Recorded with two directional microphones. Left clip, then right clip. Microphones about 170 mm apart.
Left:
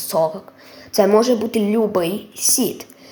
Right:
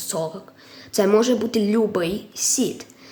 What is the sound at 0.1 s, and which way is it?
Speech, 15° right (ahead or behind).